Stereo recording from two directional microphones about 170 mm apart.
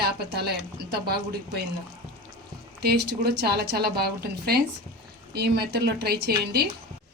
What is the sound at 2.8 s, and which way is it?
A woman's voice, 70° right (ahead or behind).